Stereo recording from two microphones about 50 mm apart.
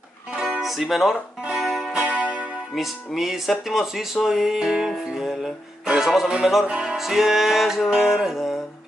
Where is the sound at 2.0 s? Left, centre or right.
Right.